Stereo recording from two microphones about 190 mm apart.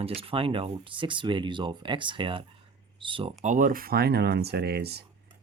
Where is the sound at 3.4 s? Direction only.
40° right (ahead or behind).